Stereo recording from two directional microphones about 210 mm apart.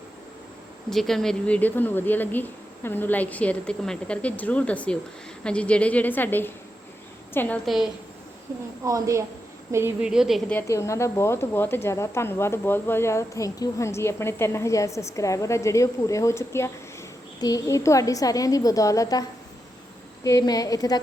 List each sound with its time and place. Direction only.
0.9 s speech: centre (ahead or behind)
8.8 s a woman's voice: 15° right (ahead or behind)
10.7 s speech: 15° left (ahead or behind)
20.2 s speech: 15° left (ahead or behind)